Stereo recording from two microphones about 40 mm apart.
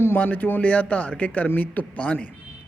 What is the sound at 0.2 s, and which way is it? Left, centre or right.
Speech, left.